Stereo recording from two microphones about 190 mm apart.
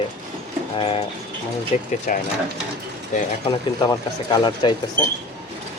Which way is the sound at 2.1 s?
45° left (ahead or behind).